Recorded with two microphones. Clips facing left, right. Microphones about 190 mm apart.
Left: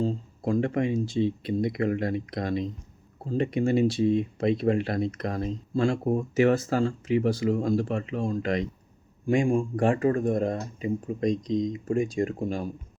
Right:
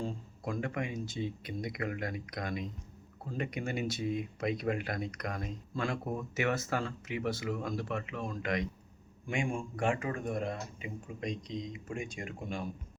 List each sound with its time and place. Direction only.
0.0 s speech: 30° left (ahead or behind)